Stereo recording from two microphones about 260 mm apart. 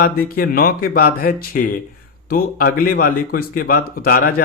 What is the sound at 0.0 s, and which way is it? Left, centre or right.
Speech, left.